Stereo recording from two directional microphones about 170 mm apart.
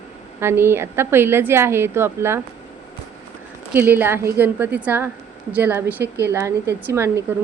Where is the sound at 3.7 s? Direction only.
10° right (ahead or behind).